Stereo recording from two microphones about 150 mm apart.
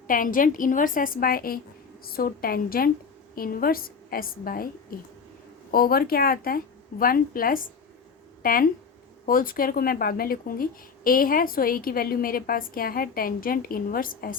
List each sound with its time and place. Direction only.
0.1 s speech: 65° left (ahead or behind)